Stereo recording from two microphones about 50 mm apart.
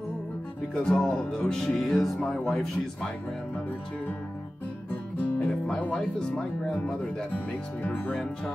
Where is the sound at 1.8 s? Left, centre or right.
Centre.